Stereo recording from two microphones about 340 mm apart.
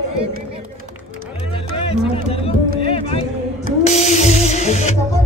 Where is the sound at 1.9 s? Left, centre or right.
Centre.